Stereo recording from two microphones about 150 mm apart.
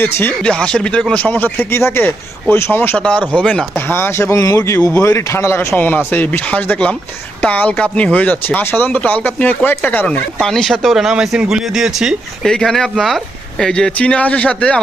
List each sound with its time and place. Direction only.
0.0 s speech: 15° left (ahead or behind)